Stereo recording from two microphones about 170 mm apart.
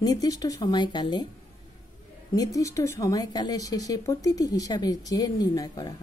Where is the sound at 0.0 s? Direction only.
20° left (ahead or behind).